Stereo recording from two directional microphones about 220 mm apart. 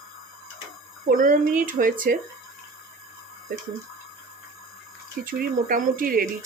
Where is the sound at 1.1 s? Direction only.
35° right (ahead or behind).